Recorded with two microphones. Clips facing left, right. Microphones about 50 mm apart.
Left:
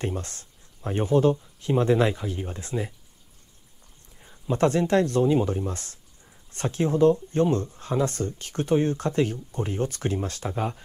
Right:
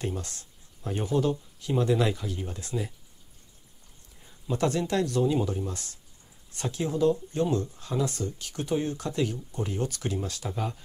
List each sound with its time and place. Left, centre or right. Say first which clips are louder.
0.0 s speech: left 3 dB; left
4.2 s speech: left 5 dB; left